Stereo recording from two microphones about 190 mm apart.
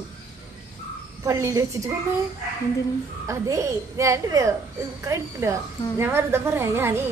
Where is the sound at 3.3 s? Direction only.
15° right (ahead or behind).